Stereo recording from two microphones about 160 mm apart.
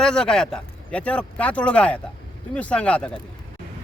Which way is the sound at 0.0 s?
5° left (ahead or behind).